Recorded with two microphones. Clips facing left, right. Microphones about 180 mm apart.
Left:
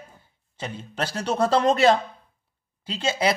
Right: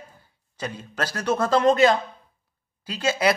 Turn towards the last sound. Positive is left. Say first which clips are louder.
# right 1 dB
turn(degrees=25)  # may be behind; listen again after turning